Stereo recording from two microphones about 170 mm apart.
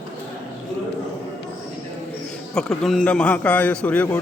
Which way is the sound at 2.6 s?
5° left (ahead or behind).